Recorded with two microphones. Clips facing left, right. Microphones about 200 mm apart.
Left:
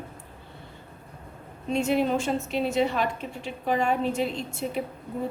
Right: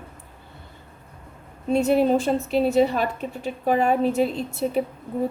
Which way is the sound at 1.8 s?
40° right (ahead or behind).